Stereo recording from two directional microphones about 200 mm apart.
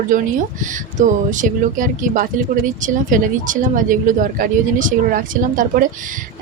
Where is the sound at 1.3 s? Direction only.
40° right (ahead or behind).